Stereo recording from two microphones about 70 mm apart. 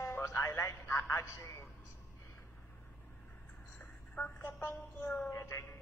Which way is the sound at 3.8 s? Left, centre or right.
Left.